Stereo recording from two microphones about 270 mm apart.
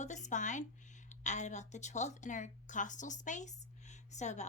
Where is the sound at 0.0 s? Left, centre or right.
Left.